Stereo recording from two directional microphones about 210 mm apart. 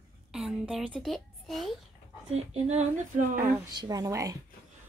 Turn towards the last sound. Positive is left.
turn(degrees=-15)  # may be behind; listen again after turning